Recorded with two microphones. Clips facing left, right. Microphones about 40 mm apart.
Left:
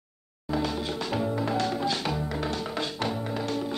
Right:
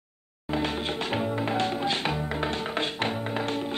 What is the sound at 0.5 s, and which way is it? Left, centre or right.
Music, right.